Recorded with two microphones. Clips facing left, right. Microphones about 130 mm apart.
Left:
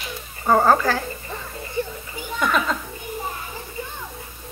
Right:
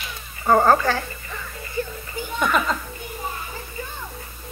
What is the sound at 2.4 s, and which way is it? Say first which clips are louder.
Speech: even; 5° right (ahead or behind).